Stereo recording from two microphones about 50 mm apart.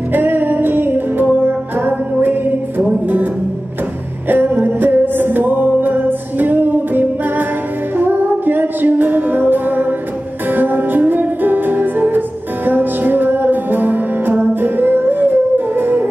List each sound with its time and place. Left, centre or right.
0.1 s music: right
4.3 s music: right